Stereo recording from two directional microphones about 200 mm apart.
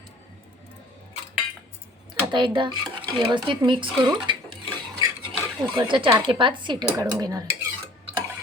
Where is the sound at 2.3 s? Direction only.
25° right (ahead or behind).